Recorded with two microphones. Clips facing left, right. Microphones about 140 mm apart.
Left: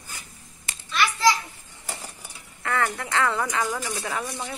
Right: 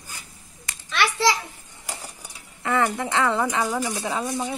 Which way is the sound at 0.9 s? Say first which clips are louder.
Right 2 dB; 85° right.